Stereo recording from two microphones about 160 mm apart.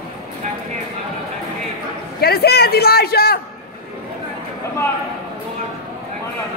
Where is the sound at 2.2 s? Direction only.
80° left.